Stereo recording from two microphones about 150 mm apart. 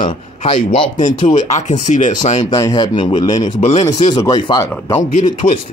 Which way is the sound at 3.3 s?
50° left (ahead or behind).